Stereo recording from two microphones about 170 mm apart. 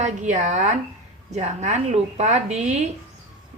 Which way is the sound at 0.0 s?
45° right (ahead or behind).